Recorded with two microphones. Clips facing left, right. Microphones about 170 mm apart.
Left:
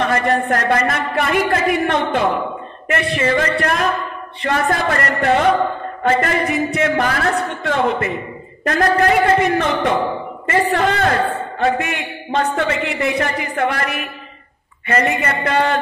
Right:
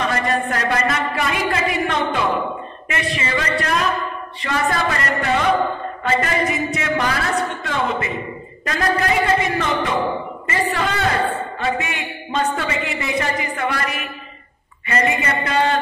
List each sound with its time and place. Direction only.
0.0 s a man's voice: 55° left (ahead or behind)